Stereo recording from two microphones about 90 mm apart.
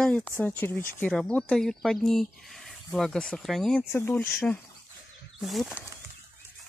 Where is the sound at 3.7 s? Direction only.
25° left (ahead or behind).